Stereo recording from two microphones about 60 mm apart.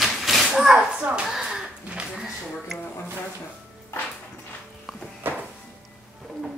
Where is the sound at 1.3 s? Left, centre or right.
Centre.